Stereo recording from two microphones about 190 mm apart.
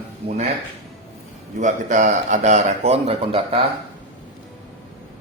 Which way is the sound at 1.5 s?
40° right (ahead or behind).